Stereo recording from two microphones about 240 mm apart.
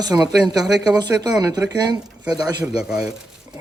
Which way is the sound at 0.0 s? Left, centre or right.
Centre.